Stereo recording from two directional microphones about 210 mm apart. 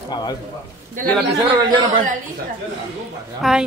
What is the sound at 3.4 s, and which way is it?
Speech, centre (ahead or behind).